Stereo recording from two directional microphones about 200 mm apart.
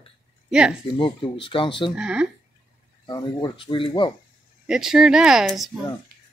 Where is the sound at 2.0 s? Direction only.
5° right (ahead or behind).